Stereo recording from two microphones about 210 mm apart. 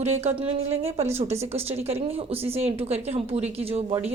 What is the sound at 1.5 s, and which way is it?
A woman's voice, 30° right (ahead or behind).